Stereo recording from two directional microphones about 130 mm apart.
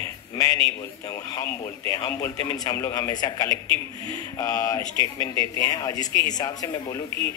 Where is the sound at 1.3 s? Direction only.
25° left (ahead or behind).